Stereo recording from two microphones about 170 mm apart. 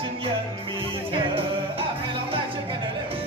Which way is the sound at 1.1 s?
30° right (ahead or behind).